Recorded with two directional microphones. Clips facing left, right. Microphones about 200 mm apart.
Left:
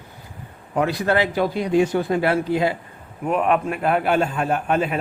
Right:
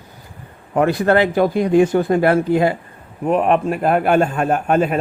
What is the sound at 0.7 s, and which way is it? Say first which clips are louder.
A man's voice: right 5 dB; 50° right (ahead or behind).